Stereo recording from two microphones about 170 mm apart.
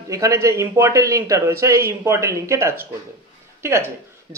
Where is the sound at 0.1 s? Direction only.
20° right (ahead or behind).